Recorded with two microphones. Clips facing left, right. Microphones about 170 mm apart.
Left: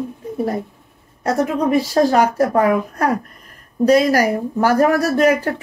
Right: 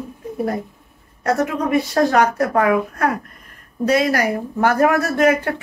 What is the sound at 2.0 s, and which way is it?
Speech, 30° left (ahead or behind).